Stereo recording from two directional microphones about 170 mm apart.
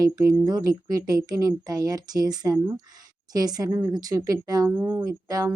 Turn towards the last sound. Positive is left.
turn(degrees=-20)  # may be behind; listen again after turning